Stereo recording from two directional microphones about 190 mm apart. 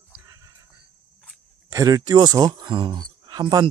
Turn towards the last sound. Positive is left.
turn(degrees=-25)  # may be behind; listen again after turning